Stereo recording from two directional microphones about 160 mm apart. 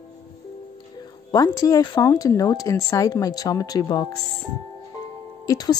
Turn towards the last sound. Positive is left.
turn(degrees=25)  # may be behind; listen again after turning